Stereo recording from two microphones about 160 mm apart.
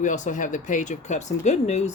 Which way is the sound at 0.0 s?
50° left (ahead or behind).